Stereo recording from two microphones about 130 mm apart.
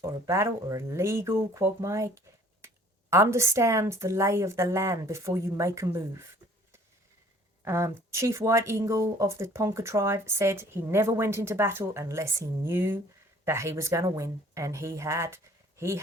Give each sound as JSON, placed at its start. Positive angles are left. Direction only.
{"t": 0.0, "sound": "speech", "side_deg": -20}
{"t": 7.6, "sound": "speech", "side_deg": -20}